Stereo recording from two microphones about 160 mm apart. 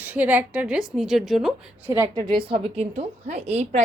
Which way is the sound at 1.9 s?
15° right (ahead or behind).